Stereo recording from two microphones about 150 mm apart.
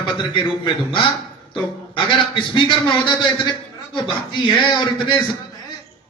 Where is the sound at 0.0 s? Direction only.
35° left (ahead or behind).